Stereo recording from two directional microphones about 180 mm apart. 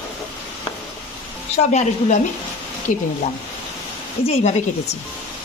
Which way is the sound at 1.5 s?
40° left (ahead or behind).